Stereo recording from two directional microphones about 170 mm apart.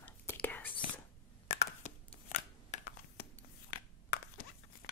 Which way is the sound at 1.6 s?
45° left (ahead or behind).